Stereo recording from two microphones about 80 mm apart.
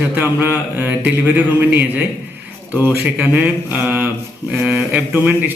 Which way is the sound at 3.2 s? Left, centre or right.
Right.